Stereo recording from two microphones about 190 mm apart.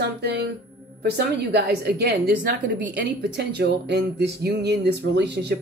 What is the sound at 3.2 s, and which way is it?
Music, 60° right (ahead or behind).